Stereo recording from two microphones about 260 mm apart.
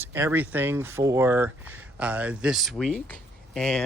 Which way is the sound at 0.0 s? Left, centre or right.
Centre.